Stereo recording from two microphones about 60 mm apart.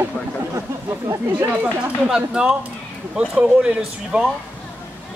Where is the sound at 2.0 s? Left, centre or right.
Centre.